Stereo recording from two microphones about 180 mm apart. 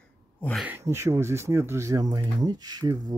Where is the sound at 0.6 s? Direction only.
15° right (ahead or behind).